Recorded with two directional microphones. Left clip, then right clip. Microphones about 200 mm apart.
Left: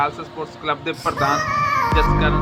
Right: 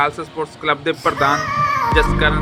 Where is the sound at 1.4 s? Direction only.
Centre (ahead or behind).